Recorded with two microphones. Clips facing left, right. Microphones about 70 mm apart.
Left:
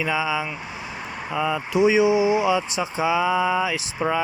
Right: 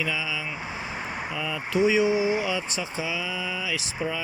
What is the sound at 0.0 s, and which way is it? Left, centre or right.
Speech, left.